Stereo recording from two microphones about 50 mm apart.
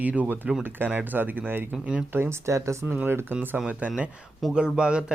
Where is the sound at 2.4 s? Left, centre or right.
Right.